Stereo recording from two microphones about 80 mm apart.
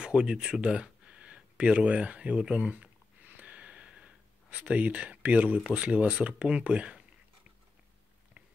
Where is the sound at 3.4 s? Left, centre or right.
Centre.